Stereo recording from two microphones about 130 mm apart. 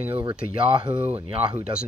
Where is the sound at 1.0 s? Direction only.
10° right (ahead or behind).